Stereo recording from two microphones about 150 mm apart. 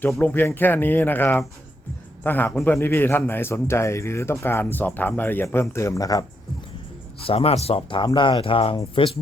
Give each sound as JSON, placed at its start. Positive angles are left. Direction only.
{"t": 0.2, "sound": "a man's voice", "side_deg": 15}
{"t": 7.3, "sound": "speech", "side_deg": 40}